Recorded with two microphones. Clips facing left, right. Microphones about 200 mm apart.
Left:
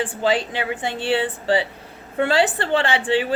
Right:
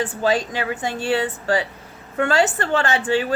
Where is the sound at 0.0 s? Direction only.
30° left (ahead or behind).